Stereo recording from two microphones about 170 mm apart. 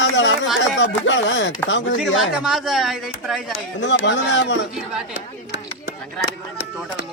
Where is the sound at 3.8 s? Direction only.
90° left.